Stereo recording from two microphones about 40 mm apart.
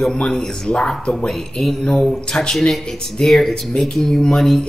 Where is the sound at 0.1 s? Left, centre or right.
Centre.